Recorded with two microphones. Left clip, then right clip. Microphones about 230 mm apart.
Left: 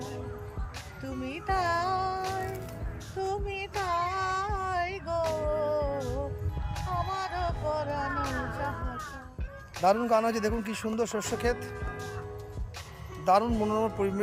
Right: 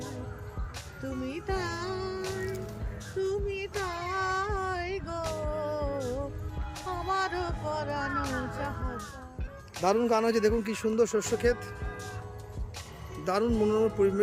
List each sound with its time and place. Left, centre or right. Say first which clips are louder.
1.1 s music: left 4 dB; centre
3.2 s a sound: right 1 dB; centre
6.7 s music: right 2 dB; centre
9.7 s a man's voice: left 2 dB; centre
13.2 s a man's voice: left 3 dB; centre